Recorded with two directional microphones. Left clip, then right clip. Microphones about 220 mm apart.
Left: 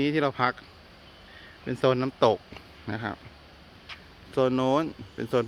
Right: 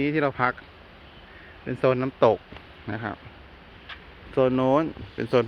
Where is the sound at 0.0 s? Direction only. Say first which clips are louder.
Right 1 dB; 30° left (ahead or behind).